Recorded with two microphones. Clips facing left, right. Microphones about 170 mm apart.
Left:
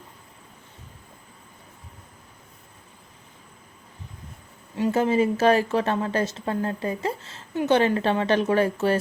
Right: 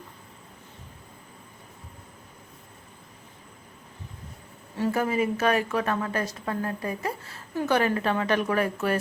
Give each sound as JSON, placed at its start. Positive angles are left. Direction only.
{"t": 4.8, "sound": "a woman's voice", "side_deg": 25}